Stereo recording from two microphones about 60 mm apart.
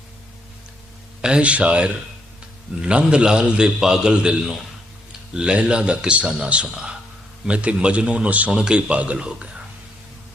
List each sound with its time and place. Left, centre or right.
1.2 s a man's voice: centre